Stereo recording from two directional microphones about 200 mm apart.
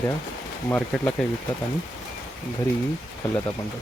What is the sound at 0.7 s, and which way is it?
Speech, 10° left (ahead or behind).